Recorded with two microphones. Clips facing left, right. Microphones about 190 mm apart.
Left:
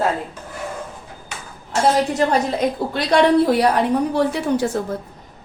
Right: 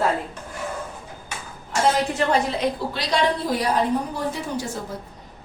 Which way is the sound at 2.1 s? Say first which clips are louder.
Left 3 dB; 40° left (ahead or behind).